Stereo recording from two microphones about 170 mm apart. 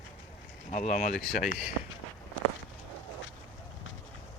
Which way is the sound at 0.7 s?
45° left (ahead or behind).